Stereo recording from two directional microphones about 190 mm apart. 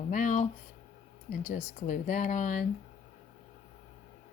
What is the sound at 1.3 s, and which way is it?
Speech, 40° left (ahead or behind).